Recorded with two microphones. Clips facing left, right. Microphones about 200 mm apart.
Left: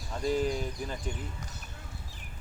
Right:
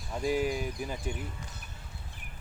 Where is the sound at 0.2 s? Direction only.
10° right (ahead or behind).